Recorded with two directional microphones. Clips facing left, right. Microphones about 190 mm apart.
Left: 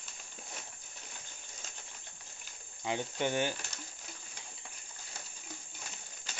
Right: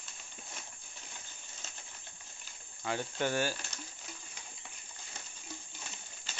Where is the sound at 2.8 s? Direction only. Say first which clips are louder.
Even; 15° left (ahead or behind).